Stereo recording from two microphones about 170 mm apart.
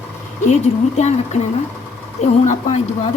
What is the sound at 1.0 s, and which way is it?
A woman's voice, 40° left (ahead or behind).